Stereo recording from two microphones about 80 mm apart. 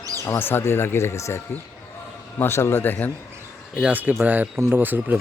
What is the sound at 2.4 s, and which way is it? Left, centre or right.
Speech, left.